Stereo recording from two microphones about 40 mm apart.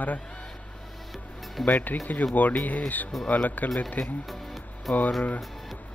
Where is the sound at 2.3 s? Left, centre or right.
Left.